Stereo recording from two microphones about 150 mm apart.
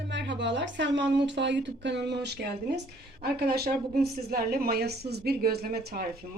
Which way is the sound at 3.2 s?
90° right.